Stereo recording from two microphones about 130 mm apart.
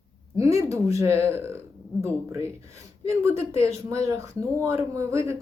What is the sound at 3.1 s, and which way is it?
Speech, 20° right (ahead or behind).